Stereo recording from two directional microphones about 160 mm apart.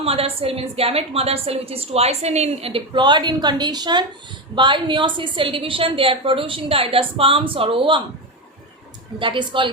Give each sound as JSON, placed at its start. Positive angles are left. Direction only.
{"t": 0.0, "sound": "a woman's voice", "side_deg": -35}
{"t": 9.1, "sound": "a woman's voice", "side_deg": -30}